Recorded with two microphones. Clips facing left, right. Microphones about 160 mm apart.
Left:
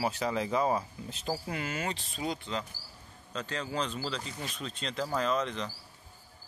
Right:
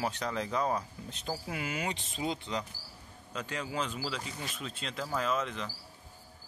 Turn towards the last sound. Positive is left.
turn(degrees=-5)  # may be behind; listen again after turning